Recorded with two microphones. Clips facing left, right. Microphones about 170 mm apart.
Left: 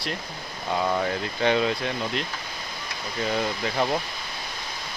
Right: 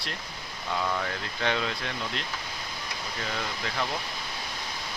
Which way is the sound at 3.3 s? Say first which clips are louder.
Left 8 dB; 20° left (ahead or behind).